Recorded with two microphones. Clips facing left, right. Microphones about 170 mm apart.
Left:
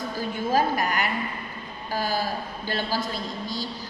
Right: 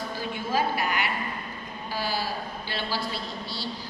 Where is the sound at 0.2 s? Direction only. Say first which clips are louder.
Left 4 dB; 45° left (ahead or behind).